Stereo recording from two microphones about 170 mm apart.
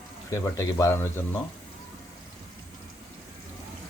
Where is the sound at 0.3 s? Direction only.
15° left (ahead or behind).